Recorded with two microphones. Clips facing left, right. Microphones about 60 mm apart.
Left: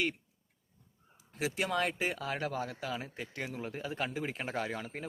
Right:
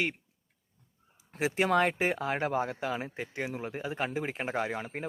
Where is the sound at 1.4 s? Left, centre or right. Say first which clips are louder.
Right 6 dB; right.